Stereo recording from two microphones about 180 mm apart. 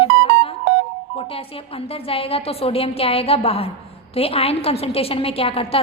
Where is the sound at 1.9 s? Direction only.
30° left (ahead or behind).